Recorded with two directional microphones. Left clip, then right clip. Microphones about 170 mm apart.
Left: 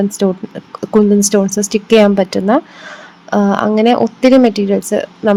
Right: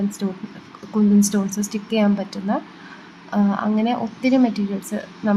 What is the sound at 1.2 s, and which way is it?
Speech, 45° left (ahead or behind).